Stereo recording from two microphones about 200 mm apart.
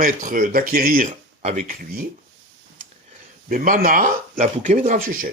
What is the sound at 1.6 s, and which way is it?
Speech, 45° right (ahead or behind).